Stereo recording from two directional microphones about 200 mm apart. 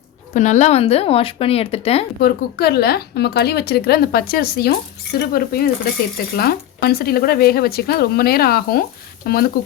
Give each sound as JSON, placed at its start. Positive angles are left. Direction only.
{"t": 0.3, "sound": "speech", "side_deg": 35}
{"t": 2.2, "sound": "a woman's voice", "side_deg": 50}